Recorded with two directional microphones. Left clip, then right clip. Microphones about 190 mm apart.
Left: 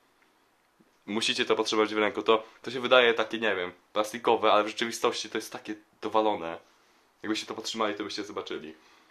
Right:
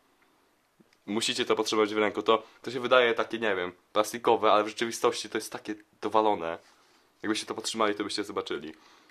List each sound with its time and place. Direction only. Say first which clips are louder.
1.0 s speech: left 1 dB; 25° right (ahead or behind)